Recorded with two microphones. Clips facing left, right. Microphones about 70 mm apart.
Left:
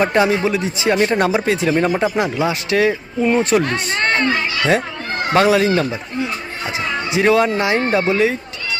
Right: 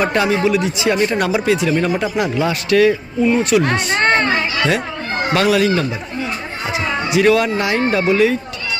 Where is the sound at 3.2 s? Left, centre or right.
Left.